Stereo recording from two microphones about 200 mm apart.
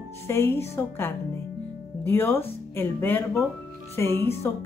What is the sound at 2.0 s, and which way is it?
Speech, 10° left (ahead or behind).